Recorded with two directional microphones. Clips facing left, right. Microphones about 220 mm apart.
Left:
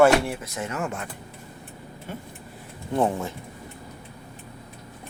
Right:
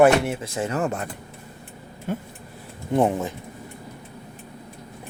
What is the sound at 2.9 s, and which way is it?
Speech, 15° right (ahead or behind).